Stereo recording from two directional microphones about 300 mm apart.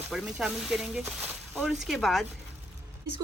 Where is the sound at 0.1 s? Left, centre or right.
Centre.